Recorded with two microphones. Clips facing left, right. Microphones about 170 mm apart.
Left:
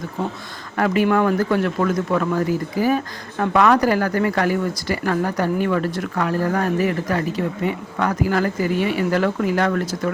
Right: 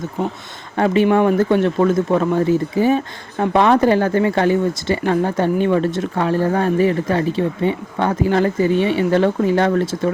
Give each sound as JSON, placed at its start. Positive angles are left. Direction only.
{"t": 0.8, "sound": "speech", "side_deg": -25}